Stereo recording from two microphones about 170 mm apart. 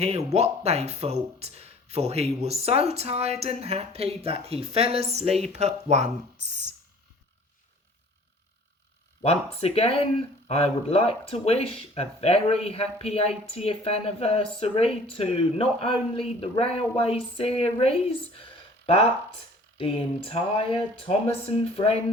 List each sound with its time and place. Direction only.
0.0 s speech: 35° right (ahead or behind)
9.2 s speech: 35° left (ahead or behind)
19.8 s speech: 30° left (ahead or behind)